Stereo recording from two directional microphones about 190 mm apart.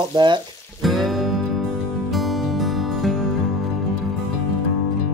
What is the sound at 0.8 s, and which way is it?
Music, centre (ahead or behind).